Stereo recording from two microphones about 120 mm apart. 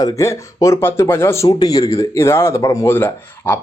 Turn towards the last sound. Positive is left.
turn(degrees=15)  # may be behind; listen again after turning